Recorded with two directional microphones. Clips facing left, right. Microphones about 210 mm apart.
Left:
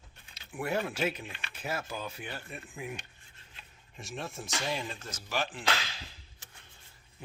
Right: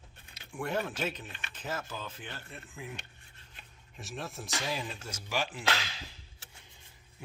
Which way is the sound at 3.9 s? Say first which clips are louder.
Left 1 dB; centre (ahead or behind).